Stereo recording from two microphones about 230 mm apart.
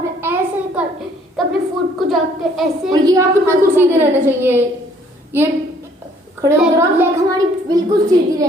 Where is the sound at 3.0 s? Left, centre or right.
Centre.